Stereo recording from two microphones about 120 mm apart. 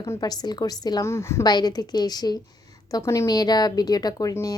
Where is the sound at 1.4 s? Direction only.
35° left (ahead or behind).